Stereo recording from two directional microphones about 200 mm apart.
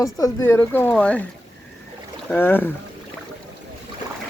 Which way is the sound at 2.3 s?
10° left (ahead or behind).